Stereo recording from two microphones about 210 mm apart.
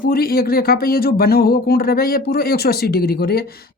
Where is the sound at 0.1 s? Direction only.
45° left (ahead or behind).